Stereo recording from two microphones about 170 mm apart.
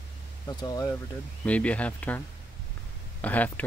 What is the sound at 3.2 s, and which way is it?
Speech, 10° left (ahead or behind).